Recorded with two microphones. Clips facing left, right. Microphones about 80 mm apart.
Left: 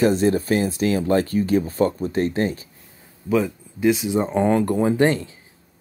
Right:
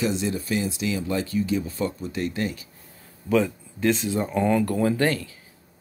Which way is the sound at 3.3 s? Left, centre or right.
Centre.